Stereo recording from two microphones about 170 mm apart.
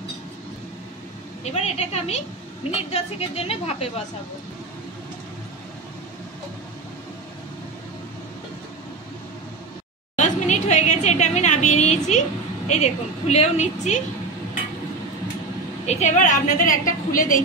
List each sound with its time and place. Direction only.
1.4 s a woman's voice: 40° left (ahead or behind)
10.1 s a sound: 45° left (ahead or behind)
15.8 s a woman's voice: 40° left (ahead or behind)